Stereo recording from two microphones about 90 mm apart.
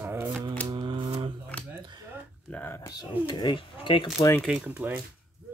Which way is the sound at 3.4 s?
65° left (ahead or behind).